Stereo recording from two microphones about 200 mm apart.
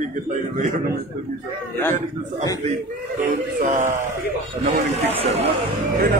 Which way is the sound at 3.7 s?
40° right (ahead or behind).